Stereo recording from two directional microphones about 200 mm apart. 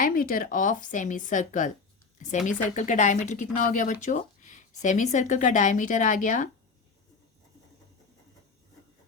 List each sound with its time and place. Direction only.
0.0 s speech: 45° left (ahead or behind)